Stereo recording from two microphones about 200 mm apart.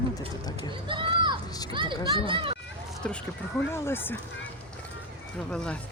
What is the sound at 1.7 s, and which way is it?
Speech, 25° right (ahead or behind).